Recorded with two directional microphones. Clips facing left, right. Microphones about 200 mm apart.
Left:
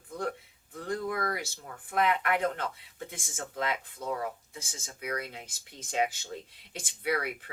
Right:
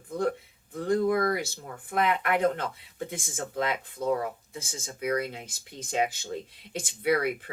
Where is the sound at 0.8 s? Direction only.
25° right (ahead or behind).